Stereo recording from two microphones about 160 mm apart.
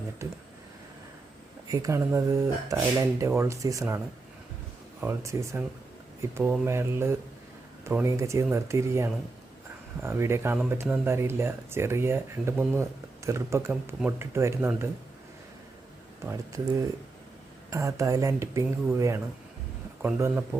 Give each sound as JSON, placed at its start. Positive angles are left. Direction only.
{"t": 0.2, "sound": "speech", "side_deg": -15}
{"t": 1.6, "sound": "speech", "side_deg": -20}
{"t": 16.2, "sound": "speech", "side_deg": -20}